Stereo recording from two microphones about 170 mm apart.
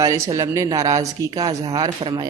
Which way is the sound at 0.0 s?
20° right (ahead or behind).